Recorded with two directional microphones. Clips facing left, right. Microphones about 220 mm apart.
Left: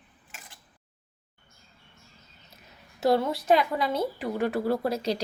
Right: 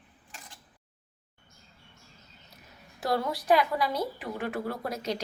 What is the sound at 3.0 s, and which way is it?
A woman's voice, 25° left (ahead or behind).